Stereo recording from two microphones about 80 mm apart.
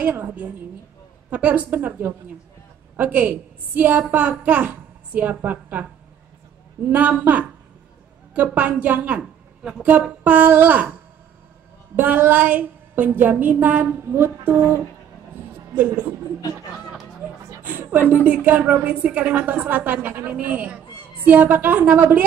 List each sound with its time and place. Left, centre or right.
0.0 s a woman's voice: right
6.9 s a woman's voice: centre
11.9 s a woman's voice: right
15.7 s speech: centre
17.6 s a sound: right
18.2 s a woman's voice: centre